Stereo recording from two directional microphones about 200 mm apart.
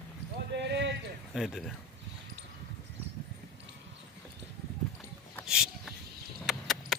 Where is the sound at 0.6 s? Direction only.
60° right (ahead or behind).